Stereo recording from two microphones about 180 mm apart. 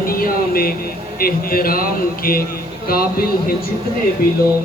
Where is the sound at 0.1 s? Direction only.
55° left (ahead or behind).